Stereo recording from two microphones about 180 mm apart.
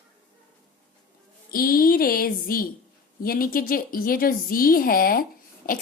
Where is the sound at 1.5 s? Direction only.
55° left (ahead or behind).